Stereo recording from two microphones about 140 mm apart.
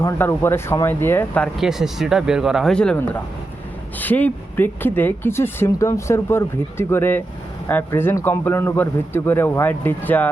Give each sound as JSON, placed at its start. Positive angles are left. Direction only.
{"t": 0.0, "sound": "speech", "side_deg": 20}
{"t": 1.5, "sound": "speech", "side_deg": -5}